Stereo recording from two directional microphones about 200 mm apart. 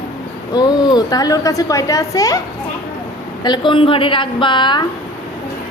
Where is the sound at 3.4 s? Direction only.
25° left (ahead or behind).